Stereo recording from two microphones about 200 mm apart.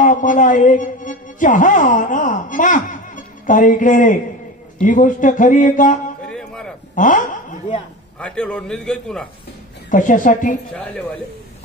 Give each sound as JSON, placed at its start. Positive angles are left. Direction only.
{"t": 0.0, "sound": "a man's voice", "side_deg": 40}
{"t": 6.3, "sound": "a sound", "side_deg": 5}
{"t": 7.0, "sound": "a man's voice", "side_deg": 40}
{"t": 8.2, "sound": "a man's voice", "side_deg": 5}
{"t": 9.8, "sound": "a man's voice", "side_deg": 40}